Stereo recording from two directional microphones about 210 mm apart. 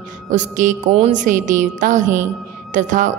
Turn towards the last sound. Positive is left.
turn(degrees=-35)  # may be behind; listen again after turning